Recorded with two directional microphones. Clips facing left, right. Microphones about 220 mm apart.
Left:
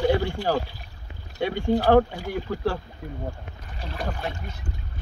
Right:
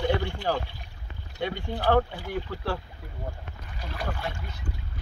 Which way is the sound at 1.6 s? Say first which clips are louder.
Left 6 dB; 45° left (ahead or behind).